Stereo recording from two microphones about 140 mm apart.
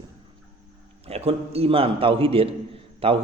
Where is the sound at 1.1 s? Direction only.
45° right (ahead or behind).